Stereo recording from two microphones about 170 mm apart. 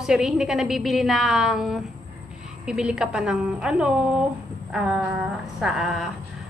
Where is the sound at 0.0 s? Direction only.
5° right (ahead or behind).